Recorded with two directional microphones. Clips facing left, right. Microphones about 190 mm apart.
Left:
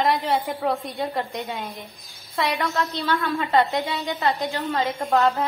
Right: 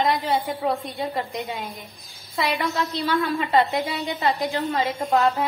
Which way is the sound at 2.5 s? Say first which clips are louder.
Even; 15° right (ahead or behind).